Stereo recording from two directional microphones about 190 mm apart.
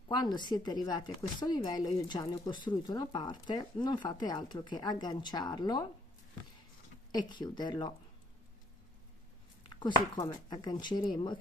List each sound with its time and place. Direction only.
0.1 s speech: 20° left (ahead or behind)
7.1 s speech: 20° left (ahead or behind)
9.8 s speech: 20° left (ahead or behind)